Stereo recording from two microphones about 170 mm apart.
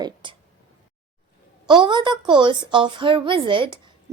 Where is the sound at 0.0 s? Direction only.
30° right (ahead or behind).